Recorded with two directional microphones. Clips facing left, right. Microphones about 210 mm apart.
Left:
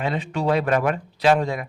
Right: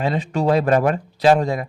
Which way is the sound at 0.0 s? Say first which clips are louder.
Right 4 dB; 35° right (ahead or behind).